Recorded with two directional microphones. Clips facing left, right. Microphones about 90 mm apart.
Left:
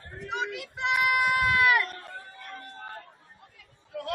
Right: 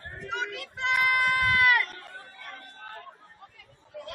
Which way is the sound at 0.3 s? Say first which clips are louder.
Left 1 dB; 15° left (ahead or behind).